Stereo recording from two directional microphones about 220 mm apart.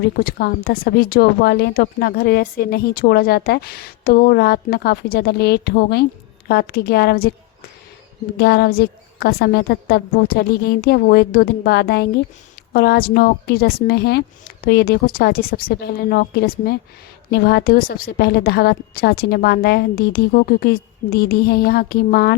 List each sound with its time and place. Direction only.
0.0 s speech: 40° left (ahead or behind)
8.4 s speech: 45° left (ahead or behind)